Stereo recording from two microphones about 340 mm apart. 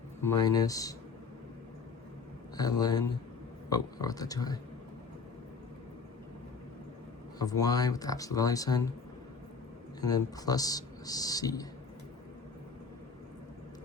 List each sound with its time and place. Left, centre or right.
0.2 s speech: centre
2.6 s speech: centre
7.3 s speech: centre
10.0 s speech: centre